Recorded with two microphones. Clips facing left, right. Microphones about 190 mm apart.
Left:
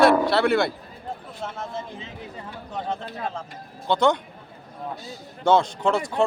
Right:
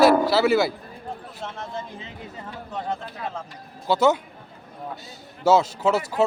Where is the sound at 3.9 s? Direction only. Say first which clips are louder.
Right 1 dB; 5° right (ahead or behind).